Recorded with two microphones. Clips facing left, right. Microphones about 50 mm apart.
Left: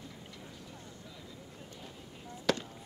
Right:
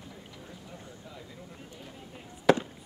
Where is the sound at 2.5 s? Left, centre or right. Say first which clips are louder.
Right 9 dB; centre.